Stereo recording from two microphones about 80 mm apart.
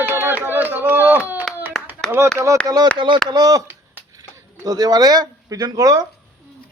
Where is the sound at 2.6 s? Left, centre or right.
Right.